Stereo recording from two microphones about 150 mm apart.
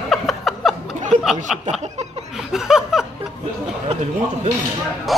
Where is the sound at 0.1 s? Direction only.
Centre (ahead or behind).